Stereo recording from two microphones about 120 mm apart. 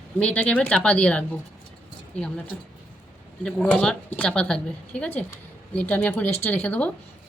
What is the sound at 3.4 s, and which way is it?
A woman's voice, 10° left (ahead or behind).